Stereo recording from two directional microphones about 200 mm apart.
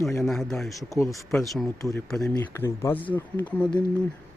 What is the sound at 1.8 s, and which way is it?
Speech, 15° left (ahead or behind).